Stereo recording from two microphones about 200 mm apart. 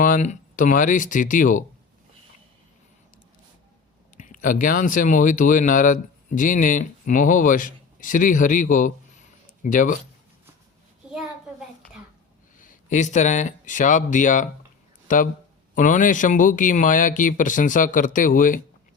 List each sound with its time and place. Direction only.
0.0 s speech: 40° left (ahead or behind)
4.2 s speech: 40° left (ahead or behind)
11.0 s a sound: 5° right (ahead or behind)
12.5 s speech: 40° left (ahead or behind)